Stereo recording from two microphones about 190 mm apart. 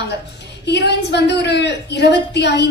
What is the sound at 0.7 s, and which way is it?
A woman's voice, 60° left (ahead or behind).